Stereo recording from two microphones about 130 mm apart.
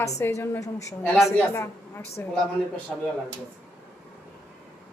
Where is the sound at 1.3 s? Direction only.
20° left (ahead or behind).